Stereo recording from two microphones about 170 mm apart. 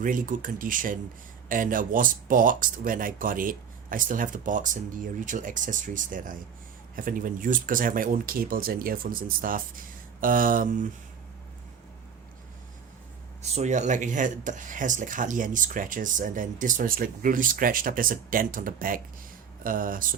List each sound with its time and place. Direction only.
0.0 s speech: 50° right (ahead or behind)
13.4 s speech: 40° right (ahead or behind)